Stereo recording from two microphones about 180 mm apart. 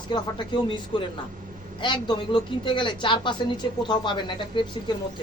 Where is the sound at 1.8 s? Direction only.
25° left (ahead or behind).